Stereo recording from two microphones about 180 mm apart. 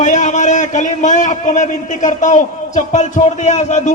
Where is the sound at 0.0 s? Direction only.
40° left (ahead or behind).